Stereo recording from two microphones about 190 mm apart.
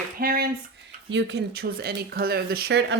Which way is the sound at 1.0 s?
65° right (ahead or behind).